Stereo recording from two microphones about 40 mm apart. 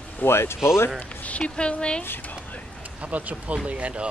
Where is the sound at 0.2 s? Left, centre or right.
Left.